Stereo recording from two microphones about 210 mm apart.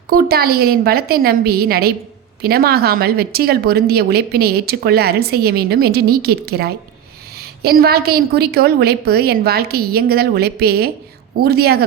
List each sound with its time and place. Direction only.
0.1 s speech: 45° right (ahead or behind)